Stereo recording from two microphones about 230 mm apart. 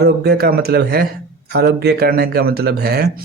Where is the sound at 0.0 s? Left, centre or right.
Right.